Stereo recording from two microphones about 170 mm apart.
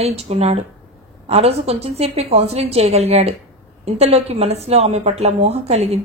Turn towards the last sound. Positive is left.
turn(degrees=-40)  # may be behind; listen again after turning